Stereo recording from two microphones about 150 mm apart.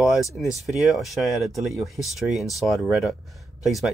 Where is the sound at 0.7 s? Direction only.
Centre (ahead or behind).